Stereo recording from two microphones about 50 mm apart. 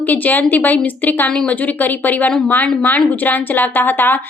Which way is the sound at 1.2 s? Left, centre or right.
Centre.